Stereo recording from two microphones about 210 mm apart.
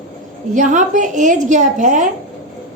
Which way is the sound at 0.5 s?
35° right (ahead or behind).